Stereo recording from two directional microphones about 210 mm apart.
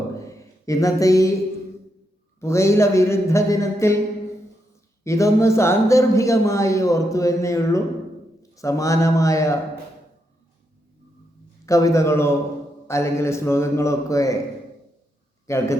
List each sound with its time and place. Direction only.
0.3 s speech: 15° left (ahead or behind)
2.4 s a man's voice: 15° left (ahead or behind)
5.0 s a man's voice: 15° left (ahead or behind)
11.6 s a man's voice: 15° left (ahead or behind)
15.4 s a man's voice: 15° left (ahead or behind)